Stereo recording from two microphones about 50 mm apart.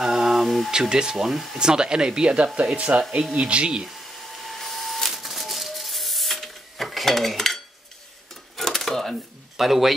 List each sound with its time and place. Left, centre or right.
0.0 s a sound: centre
0.7 s speech: centre
1.6 s speech: centre
4.4 s rub: centre
8.5 s a sound: centre
9.6 s a man's voice: centre